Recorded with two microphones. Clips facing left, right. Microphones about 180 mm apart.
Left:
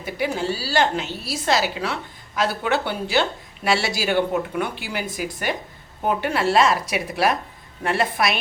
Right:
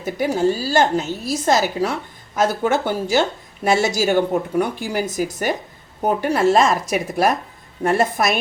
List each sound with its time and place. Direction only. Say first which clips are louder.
0.0 s a woman's voice: right 6 dB; 45° right (ahead or behind)